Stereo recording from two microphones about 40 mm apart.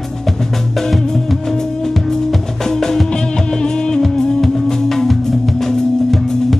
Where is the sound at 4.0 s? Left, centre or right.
Centre.